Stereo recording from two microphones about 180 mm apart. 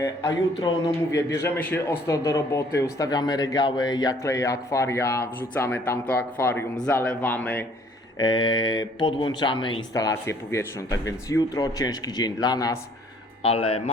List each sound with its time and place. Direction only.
0.0 s a man's voice: 20° left (ahead or behind)
8.2 s speech: 25° left (ahead or behind)
13.4 s speech: 30° left (ahead or behind)